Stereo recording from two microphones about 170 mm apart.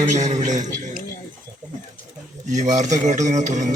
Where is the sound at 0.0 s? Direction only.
45° right (ahead or behind).